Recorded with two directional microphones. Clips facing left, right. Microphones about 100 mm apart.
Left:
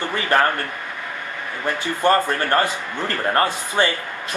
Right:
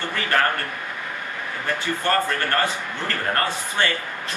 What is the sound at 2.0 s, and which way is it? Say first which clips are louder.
A man's voice: left 6 dB; 20° left (ahead or behind).